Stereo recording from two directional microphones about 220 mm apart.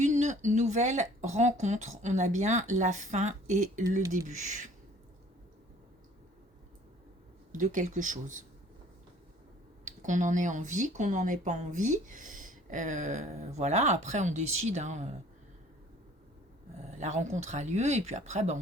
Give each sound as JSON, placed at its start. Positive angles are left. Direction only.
{"t": 0.0, "sound": "speech", "side_deg": -30}
{"t": 7.5, "sound": "speech", "side_deg": -35}
{"t": 9.8, "sound": "speech", "side_deg": -35}
{"t": 17.0, "sound": "speech", "side_deg": -30}